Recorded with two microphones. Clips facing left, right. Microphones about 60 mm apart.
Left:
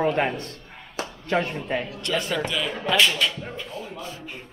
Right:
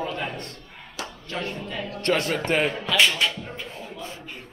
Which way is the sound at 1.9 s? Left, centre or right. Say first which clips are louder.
Right 3 dB; right.